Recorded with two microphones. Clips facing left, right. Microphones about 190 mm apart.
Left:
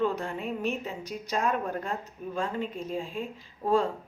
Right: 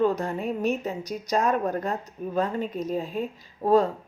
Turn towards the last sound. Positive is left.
turn(degrees=-40)  # may be behind; listen again after turning